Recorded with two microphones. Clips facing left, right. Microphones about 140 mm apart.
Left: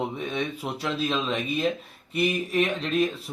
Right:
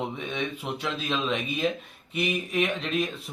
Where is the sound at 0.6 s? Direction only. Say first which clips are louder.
Left 3 dB; 5° left (ahead or behind).